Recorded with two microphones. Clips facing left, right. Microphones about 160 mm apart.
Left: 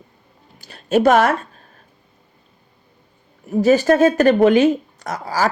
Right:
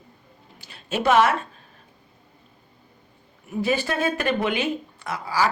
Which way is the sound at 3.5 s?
40° left (ahead or behind).